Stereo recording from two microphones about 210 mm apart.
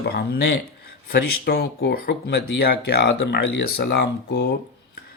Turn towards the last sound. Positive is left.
turn(degrees=55)  # may be behind; listen again after turning